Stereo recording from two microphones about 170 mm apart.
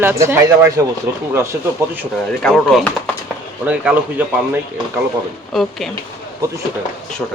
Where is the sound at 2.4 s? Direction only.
Centre (ahead or behind).